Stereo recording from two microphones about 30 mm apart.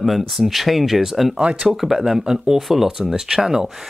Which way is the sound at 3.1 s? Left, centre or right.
Centre.